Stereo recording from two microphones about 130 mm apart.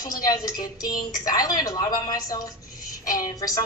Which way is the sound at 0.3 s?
30° left (ahead or behind).